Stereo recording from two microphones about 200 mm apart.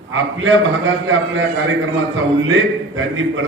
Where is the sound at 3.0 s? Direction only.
80° right.